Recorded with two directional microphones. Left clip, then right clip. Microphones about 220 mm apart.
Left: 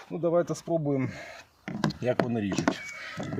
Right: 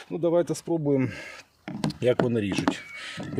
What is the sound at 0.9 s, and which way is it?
Speech, 50° right (ahead or behind).